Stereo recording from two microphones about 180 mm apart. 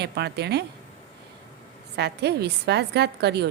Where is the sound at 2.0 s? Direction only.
65° right (ahead or behind).